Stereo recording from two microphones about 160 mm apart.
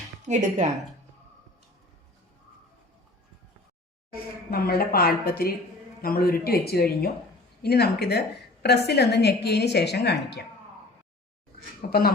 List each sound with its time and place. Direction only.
0.3 s speech: 50° right (ahead or behind)
4.5 s a woman's voice: 70° left (ahead or behind); by 10.4 s 90° left
11.9 s speech: 70° left (ahead or behind)